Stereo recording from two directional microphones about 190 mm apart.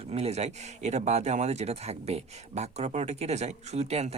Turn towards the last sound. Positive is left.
turn(degrees=-35)  # may be behind; listen again after turning